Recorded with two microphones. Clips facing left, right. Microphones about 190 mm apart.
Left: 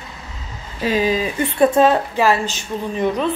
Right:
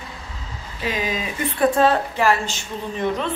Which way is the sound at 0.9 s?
35° left (ahead or behind).